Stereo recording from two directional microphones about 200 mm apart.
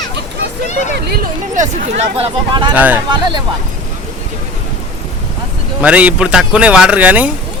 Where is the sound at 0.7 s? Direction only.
35° left (ahead or behind).